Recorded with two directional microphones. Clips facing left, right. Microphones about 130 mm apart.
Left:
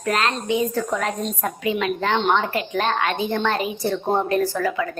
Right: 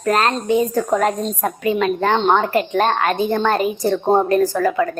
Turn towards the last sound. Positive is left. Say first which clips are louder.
# right 5 dB
turn(degrees=-45)  # may be behind; listen again after turning